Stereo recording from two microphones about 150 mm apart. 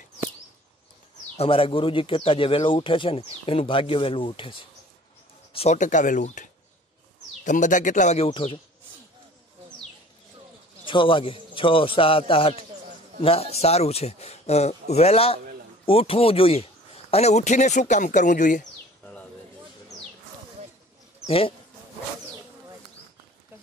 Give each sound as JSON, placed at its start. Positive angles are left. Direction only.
{"t": 1.3, "sound": "a man's voice", "side_deg": 40}
{"t": 8.3, "sound": "speech", "side_deg": 40}
{"t": 10.9, "sound": "speech", "side_deg": 35}
{"t": 21.3, "sound": "speech", "side_deg": 40}